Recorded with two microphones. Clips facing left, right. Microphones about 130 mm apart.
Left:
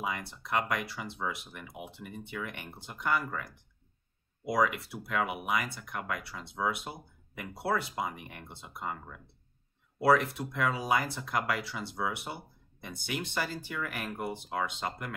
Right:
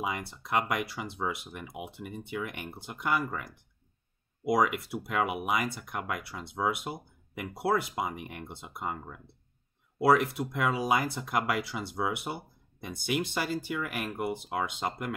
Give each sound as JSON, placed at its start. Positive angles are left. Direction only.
{"t": 0.0, "sound": "speech", "side_deg": -15}
{"t": 4.5, "sound": "speech", "side_deg": -15}